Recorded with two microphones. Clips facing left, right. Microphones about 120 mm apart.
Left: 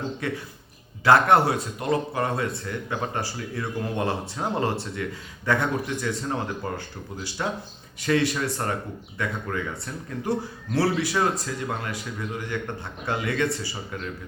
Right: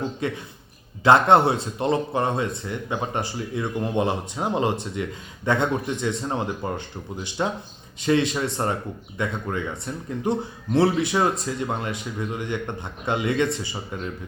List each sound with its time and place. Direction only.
0.2 s a man's voice: 20° right (ahead or behind)